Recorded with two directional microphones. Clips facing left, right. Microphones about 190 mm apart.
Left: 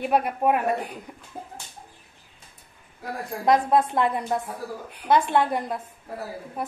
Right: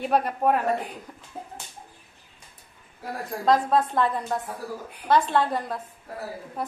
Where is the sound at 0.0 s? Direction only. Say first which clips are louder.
Left 1 dB; 10° left (ahead or behind).